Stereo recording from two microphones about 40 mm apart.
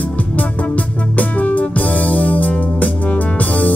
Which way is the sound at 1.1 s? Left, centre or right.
Left.